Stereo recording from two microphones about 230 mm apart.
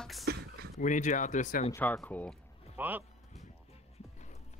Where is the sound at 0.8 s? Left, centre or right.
Left.